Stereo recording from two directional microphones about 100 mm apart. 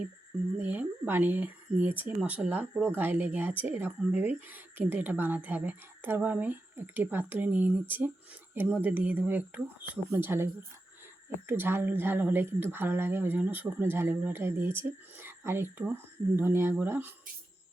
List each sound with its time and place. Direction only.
0.6 s speech: 15° right (ahead or behind)